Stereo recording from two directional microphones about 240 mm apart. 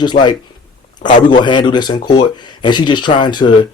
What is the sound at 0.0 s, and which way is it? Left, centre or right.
Speech, centre.